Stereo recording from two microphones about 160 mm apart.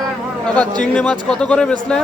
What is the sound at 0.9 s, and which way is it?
Speech, 5° left (ahead or behind).